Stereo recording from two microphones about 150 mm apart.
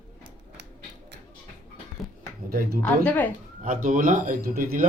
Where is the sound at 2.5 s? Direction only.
75° right (ahead or behind).